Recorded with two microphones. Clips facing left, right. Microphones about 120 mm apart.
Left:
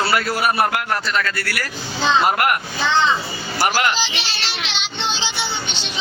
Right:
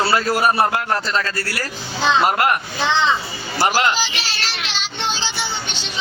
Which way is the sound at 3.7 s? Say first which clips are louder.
Right 2 dB; 25° right (ahead or behind).